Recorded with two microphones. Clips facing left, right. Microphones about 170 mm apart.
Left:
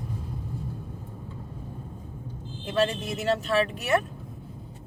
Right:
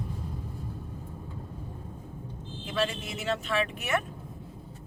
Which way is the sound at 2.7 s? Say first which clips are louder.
Left 5 dB; 40° left (ahead or behind).